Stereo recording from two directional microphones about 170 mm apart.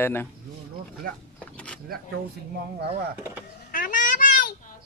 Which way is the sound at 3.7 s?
50° left (ahead or behind).